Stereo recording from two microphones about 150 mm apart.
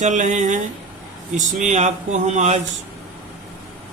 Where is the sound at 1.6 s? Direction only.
50° right (ahead or behind).